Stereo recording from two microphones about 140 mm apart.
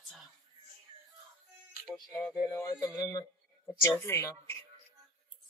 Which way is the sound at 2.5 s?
25° left (ahead or behind).